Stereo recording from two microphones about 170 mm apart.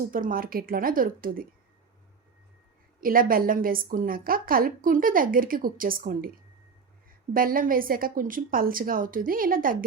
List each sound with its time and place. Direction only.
0.1 s a woman's voice: 55° right (ahead or behind)
3.0 s a woman's voice: 55° right (ahead or behind)
7.3 s a woman's voice: 55° right (ahead or behind)